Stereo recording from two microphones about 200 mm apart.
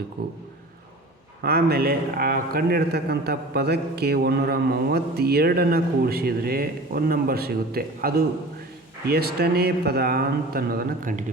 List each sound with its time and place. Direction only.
0.2 s a man's voice: 50° right (ahead or behind)
1.5 s a man's voice: 50° right (ahead or behind)